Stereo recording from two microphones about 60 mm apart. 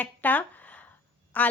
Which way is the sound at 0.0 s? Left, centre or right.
Left.